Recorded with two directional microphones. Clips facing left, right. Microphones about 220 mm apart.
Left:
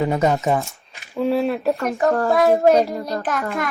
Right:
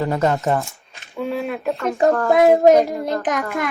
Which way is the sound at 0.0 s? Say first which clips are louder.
Left 1 dB; 10° left (ahead or behind).